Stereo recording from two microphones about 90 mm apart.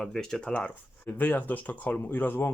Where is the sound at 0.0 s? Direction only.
5° left (ahead or behind).